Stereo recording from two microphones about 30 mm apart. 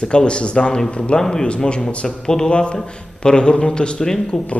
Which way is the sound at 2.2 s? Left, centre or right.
Left.